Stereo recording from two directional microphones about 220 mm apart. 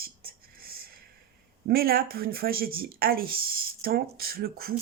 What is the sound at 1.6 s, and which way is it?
Speech, 45° right (ahead or behind).